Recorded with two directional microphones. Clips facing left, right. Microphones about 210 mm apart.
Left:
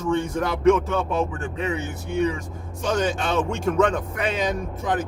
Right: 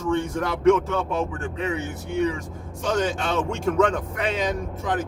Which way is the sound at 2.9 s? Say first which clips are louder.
Left 1 dB; 15° left (ahead or behind).